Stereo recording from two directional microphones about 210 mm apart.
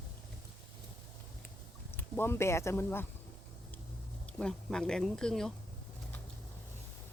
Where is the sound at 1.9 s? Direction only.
10° left (ahead or behind).